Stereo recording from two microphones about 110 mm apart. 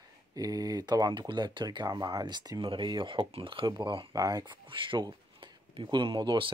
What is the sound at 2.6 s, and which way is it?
Speech, 50° right (ahead or behind).